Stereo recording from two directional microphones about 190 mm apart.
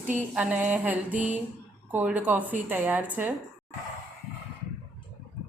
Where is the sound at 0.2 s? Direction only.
5° right (ahead or behind).